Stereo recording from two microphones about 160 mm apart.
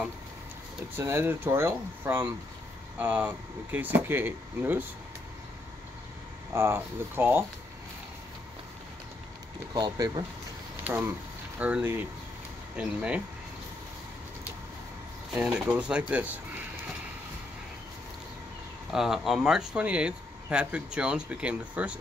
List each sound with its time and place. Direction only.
0.9 s speech: 15° right (ahead or behind)
6.5 s speech: 15° right (ahead or behind)
9.8 s speech: 25° right (ahead or behind)
10.8 s a sound: 15° right (ahead or behind)
11.5 s speech: 10° right (ahead or behind)
15.3 s speech: 5° right (ahead or behind)
18.9 s speech: 5° right (ahead or behind)